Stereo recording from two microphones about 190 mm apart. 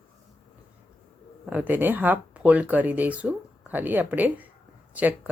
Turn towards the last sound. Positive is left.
turn(degrees=-10)  # may be behind; listen again after turning